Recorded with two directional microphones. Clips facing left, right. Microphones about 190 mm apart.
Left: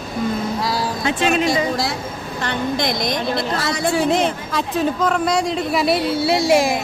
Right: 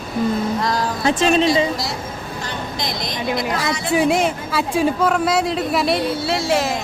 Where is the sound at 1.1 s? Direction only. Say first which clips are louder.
Right 3 dB; 35° right (ahead or behind).